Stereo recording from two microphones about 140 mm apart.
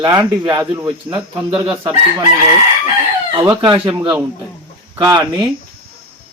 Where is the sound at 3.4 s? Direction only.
30° right (ahead or behind).